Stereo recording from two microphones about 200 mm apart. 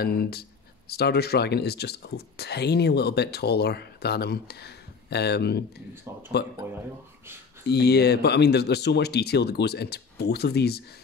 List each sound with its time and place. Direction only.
0.0 s speech: 50° left (ahead or behind)
7.6 s speech: 55° left (ahead or behind)